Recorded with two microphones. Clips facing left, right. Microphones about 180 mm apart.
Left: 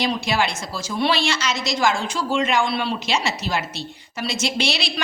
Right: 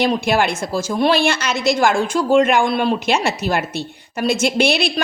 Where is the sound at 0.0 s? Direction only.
55° right (ahead or behind).